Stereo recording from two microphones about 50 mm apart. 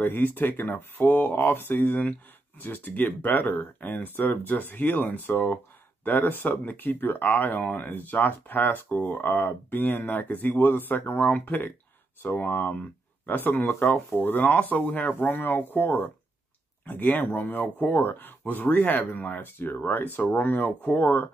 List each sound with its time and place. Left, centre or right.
0.0 s speech: left